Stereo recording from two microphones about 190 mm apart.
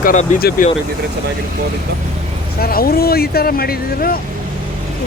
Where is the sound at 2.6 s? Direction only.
50° left (ahead or behind).